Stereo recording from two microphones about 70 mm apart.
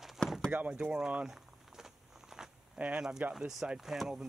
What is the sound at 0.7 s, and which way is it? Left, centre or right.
Walk, centre.